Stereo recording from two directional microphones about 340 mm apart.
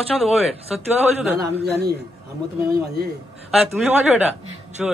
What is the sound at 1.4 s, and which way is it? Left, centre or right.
Speech, right.